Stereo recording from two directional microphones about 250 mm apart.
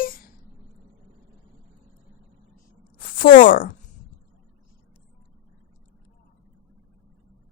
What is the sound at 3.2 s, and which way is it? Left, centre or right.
Speech, left.